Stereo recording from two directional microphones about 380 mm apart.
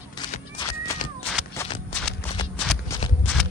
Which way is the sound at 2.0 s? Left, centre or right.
Centre.